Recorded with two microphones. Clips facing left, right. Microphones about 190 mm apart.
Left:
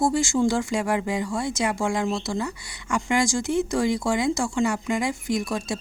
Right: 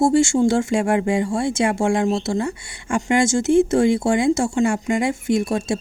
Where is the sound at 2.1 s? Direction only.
25° right (ahead or behind).